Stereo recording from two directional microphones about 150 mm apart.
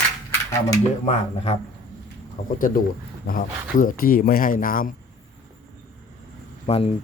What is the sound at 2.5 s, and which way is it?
Speech, 65° left (ahead or behind).